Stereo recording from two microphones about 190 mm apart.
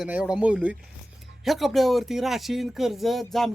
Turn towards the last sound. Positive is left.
turn(degrees=0)  # may be behind; listen again after turning